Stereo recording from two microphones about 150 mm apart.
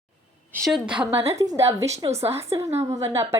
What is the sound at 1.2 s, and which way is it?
Speech, 20° right (ahead or behind).